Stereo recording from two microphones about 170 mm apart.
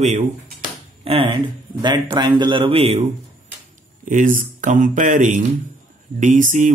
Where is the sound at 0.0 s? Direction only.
40° right (ahead or behind).